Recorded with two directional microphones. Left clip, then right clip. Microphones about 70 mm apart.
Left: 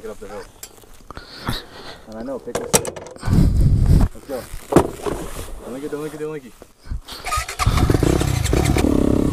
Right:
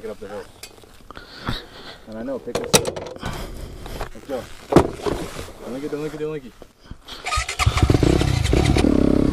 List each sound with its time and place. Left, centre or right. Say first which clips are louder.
1.1 s a sound: left 2 dB; left
2.1 s speech: even; centre
3.2 s a sound: left 7 dB; centre
4.6 s vehicle: even; left
5.6 s speech: even; left
7.1 s motorcycle: even; left